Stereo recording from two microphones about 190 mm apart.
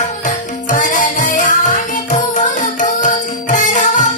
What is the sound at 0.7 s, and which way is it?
Music, 45° left (ahead or behind).